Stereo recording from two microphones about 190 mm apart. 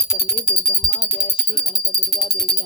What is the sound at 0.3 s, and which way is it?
Speech, 30° left (ahead or behind).